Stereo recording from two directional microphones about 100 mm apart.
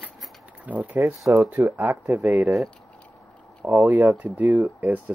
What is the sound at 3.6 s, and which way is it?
Speech, 20° right (ahead or behind).